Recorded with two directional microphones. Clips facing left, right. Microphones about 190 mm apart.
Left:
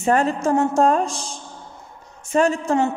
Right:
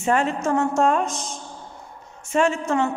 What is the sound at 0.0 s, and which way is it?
A man's voice, 35° left (ahead or behind).